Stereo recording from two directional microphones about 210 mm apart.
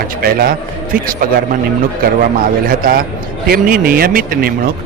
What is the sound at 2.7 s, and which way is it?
A man's voice, 45° right (ahead or behind).